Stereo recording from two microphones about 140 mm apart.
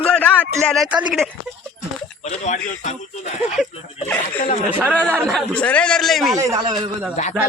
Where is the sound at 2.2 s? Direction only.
60° left (ahead or behind).